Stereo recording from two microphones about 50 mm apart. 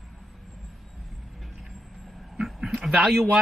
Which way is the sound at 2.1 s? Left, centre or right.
Centre.